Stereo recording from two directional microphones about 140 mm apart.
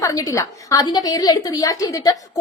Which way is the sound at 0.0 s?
25° left (ahead or behind).